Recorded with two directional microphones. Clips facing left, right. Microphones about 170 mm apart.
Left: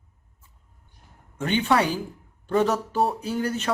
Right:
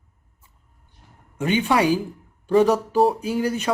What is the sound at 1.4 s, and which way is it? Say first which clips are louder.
Speech: right 3 dB; 10° right (ahead or behind).